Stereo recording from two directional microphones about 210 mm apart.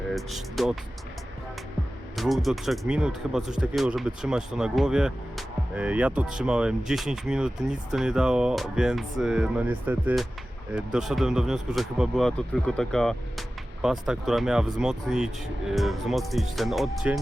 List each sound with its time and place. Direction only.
0.1 s speech: centre (ahead or behind)
2.1 s speech: centre (ahead or behind)